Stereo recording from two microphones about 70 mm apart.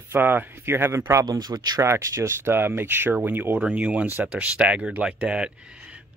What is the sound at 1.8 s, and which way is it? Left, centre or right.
Speech, right.